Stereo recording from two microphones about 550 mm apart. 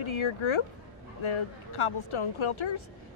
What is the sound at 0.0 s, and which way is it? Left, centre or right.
Speech, left.